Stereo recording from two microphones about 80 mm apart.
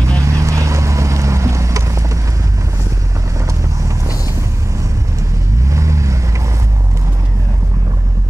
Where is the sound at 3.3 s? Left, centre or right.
Right.